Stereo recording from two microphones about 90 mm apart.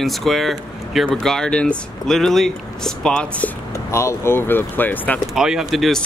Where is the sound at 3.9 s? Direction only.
30° left (ahead or behind).